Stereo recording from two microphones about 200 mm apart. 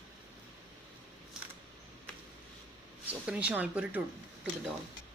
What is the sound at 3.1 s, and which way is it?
Speech, 5° right (ahead or behind).